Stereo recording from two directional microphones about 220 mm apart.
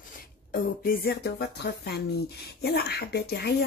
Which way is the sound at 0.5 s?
45° left (ahead or behind).